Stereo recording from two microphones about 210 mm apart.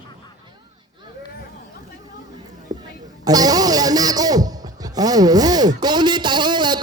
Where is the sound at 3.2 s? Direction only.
20° right (ahead or behind).